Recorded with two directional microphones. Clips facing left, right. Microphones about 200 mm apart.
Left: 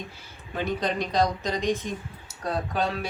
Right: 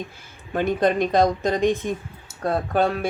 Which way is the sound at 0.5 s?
55° right (ahead or behind).